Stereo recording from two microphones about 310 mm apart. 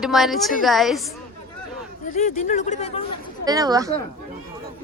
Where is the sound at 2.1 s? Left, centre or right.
Left.